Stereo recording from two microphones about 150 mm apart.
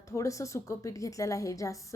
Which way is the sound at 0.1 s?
20° left (ahead or behind).